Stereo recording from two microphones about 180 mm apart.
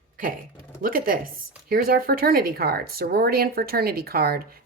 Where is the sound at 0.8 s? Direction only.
50° right (ahead or behind).